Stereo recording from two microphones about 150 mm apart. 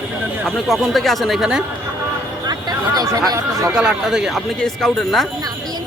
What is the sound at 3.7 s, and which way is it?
Speech, 5° right (ahead or behind).